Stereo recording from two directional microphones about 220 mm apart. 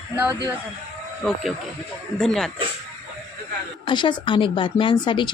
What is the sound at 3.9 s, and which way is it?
Speech, 20° left (ahead or behind).